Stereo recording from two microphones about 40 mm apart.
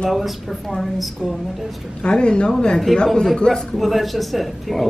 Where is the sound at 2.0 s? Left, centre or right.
Left.